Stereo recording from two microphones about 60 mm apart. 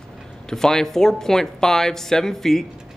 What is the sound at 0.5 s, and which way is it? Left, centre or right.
Speech, centre.